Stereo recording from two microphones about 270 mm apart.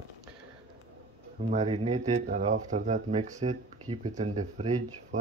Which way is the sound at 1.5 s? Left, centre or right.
Right.